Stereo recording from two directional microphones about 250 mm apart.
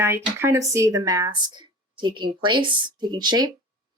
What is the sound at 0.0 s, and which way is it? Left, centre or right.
Speech, centre.